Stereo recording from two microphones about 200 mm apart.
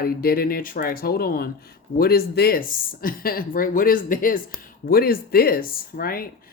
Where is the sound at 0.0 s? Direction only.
50° left (ahead or behind).